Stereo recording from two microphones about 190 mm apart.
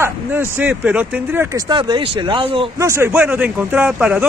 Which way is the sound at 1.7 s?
25° right (ahead or behind).